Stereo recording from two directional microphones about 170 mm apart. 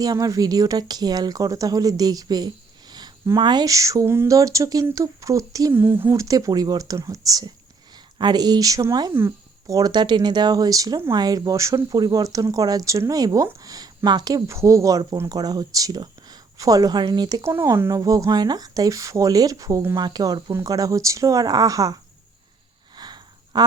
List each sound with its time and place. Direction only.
0.0 s speech: 20° right (ahead or behind)
23.0 s sniff: 25° right (ahead or behind)